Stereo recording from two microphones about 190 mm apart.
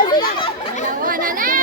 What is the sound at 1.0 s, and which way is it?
Speech, 45° right (ahead or behind).